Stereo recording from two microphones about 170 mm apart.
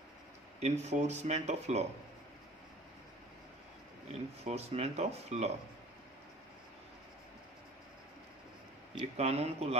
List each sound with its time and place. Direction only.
0.6 s speech: 40° right (ahead or behind)
4.5 s speech: 40° right (ahead or behind)
8.9 s speech: 40° right (ahead or behind)